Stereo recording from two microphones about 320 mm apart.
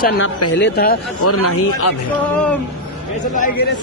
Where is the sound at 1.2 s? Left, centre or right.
Left.